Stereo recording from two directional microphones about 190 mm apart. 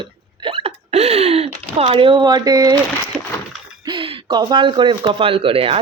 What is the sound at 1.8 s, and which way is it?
Speech, 30° right (ahead or behind).